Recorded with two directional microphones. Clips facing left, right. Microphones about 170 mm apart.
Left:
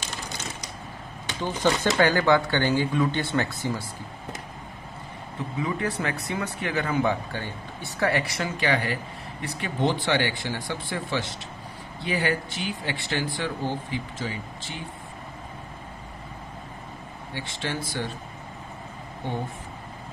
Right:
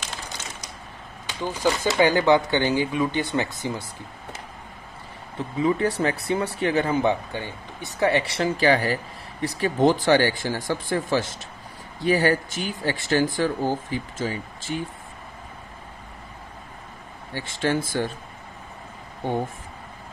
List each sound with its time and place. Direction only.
1.4 s speech: 10° right (ahead or behind)
5.6 s speech: 30° right (ahead or behind)
17.3 s speech: 45° right (ahead or behind)